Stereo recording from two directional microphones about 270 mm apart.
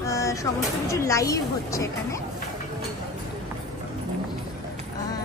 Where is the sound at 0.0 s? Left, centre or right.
Centre.